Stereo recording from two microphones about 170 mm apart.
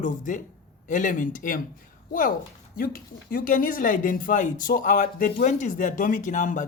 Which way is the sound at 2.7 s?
60° left (ahead or behind).